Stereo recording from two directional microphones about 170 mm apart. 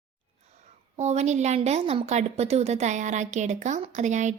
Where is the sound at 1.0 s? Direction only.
40° right (ahead or behind).